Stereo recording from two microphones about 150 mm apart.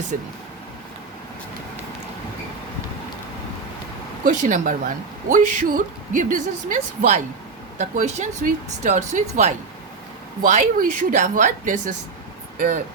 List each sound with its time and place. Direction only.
0.1 s speech: 60° right (ahead or behind)
4.2 s speech: 60° right (ahead or behind)